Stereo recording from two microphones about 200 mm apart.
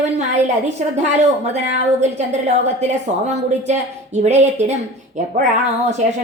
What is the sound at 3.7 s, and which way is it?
A woman's voice, 35° right (ahead or behind).